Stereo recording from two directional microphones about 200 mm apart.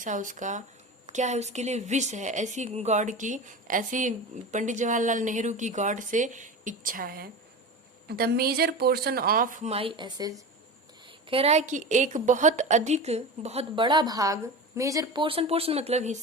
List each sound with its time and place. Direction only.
0.0 s a woman's voice: 40° right (ahead or behind)